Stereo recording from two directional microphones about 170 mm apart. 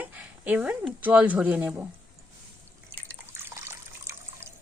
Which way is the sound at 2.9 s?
15° right (ahead or behind).